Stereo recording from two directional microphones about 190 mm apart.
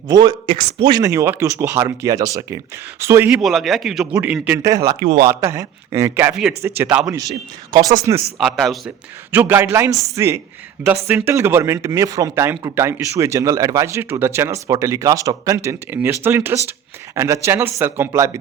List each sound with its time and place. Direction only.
0.1 s speech: 20° right (ahead or behind)
3.4 s a man's voice: centre (ahead or behind)
7.7 s speech: 20° right (ahead or behind)
8.4 s a man's voice: centre (ahead or behind)
9.3 s speech: 10° right (ahead or behind)